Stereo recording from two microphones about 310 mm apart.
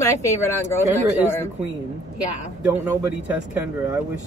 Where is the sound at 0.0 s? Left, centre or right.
Centre.